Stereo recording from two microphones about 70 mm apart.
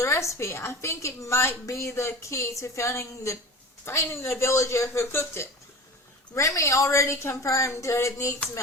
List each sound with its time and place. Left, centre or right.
0.0 s a woman's voice: left
6.3 s a woman's voice: left